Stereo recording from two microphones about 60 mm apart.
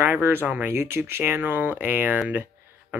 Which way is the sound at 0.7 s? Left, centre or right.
Right.